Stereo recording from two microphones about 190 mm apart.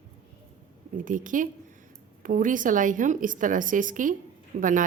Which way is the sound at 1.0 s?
45° right (ahead or behind).